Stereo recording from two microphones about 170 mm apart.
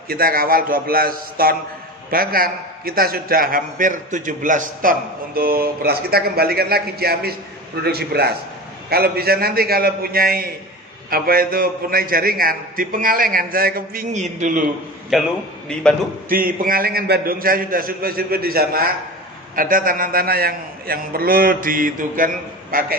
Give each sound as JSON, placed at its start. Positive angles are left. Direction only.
{"t": 0.1, "sound": "a man's voice", "side_deg": -60}
{"t": 15.1, "sound": "a man's voice", "side_deg": 0}
{"t": 16.3, "sound": "a man's voice", "side_deg": -60}